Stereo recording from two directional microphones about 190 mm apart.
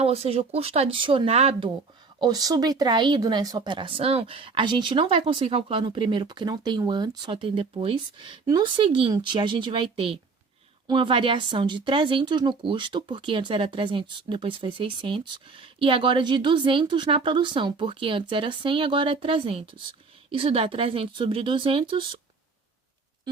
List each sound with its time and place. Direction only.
0.0 s speech: 30° right (ahead or behind)